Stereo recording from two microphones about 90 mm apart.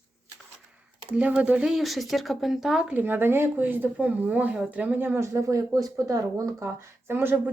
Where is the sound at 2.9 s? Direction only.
20° right (ahead or behind).